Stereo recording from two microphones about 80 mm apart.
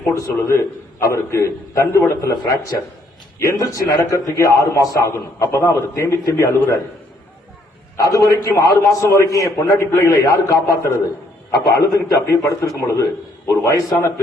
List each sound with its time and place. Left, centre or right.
0.1 s a man's voice: left
7.9 s a man's voice: left